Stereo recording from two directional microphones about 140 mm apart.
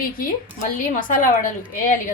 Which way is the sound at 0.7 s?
75° left (ahead or behind).